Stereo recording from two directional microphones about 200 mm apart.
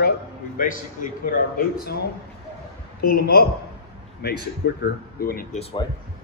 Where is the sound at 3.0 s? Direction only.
50° left (ahead or behind).